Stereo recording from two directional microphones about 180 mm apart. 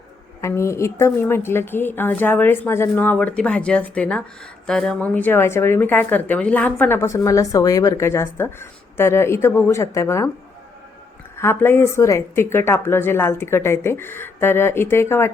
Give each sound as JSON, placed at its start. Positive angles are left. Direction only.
{"t": 0.4, "sound": "speech", "side_deg": 15}
{"t": 11.3, "sound": "speech", "side_deg": 15}